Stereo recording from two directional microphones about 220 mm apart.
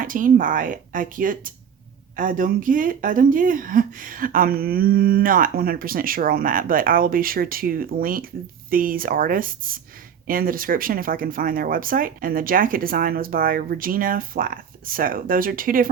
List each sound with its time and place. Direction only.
0.0 s speech: 40° right (ahead or behind)